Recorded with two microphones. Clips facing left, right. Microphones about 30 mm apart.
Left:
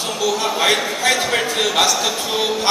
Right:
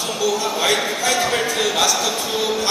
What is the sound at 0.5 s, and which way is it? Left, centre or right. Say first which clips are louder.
Speech: left 4 dB; centre.